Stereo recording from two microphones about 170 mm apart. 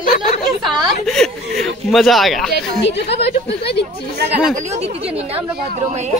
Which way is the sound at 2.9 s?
85° left.